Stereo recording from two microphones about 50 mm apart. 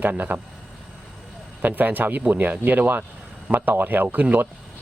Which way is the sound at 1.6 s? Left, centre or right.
Right.